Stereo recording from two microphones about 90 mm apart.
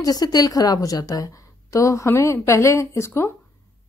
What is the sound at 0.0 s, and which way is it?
A woman's voice, 45° left (ahead or behind).